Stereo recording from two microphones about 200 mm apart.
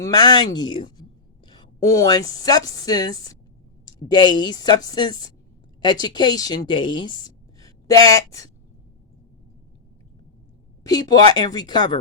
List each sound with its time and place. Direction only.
0.0 s a woman's voice: 20° left (ahead or behind)
10.8 s a woman's voice: 20° left (ahead or behind)